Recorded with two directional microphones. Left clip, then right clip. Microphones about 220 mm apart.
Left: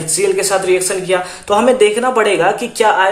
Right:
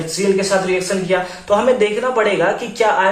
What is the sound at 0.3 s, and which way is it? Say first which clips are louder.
Speech: left 3 dB; 50° left (ahead or behind).